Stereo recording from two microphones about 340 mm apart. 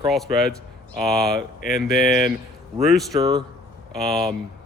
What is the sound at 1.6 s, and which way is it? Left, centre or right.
Speech, left.